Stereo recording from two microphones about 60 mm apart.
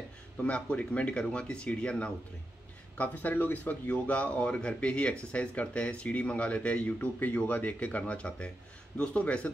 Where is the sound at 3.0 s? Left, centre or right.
Left.